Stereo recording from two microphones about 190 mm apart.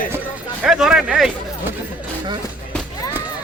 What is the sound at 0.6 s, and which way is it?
Speech, 5° right (ahead or behind).